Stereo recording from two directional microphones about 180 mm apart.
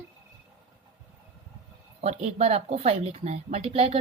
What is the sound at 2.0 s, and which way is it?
A woman's voice, 35° right (ahead or behind).